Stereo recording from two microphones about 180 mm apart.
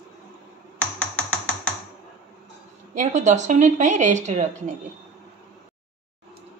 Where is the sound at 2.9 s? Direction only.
40° right (ahead or behind).